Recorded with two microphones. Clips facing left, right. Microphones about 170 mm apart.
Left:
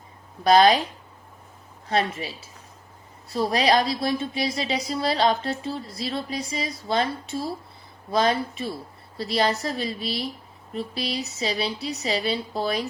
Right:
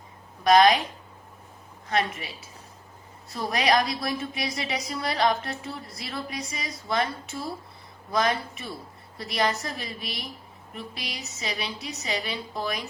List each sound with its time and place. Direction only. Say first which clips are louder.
0.4 s a woman's voice: left 1 dB; 30° left (ahead or behind)
1.9 s a woman's voice: left 3 dB; 30° left (ahead or behind)